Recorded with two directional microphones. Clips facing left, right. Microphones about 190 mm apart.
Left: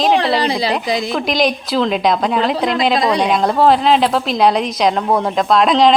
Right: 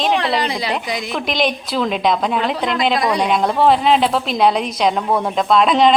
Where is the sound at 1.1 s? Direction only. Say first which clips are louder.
Left 1 dB; centre (ahead or behind).